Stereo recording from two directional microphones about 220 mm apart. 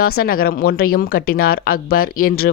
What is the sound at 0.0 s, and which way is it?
Speech, 40° left (ahead or behind).